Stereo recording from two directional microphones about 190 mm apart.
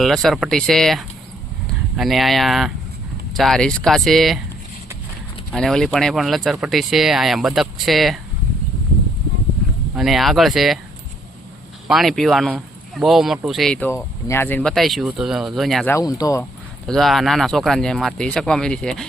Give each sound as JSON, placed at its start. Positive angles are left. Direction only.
{"t": 0.0, "sound": "speech", "side_deg": 0}
{"t": 5.5, "sound": "speech", "side_deg": 0}
{"t": 9.9, "sound": "speech", "side_deg": 0}
{"t": 11.9, "sound": "speech", "side_deg": 0}
{"t": 15.9, "sound": "speech", "side_deg": 20}
{"t": 16.8, "sound": "speech", "side_deg": 0}